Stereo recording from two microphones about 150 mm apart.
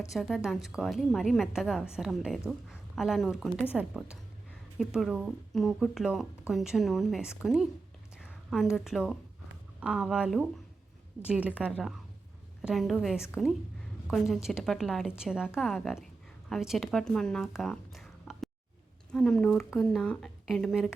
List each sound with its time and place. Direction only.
0.1 s speech: centre (ahead or behind)
8.2 s a sound: centre (ahead or behind)
8.7 s speech: centre (ahead or behind)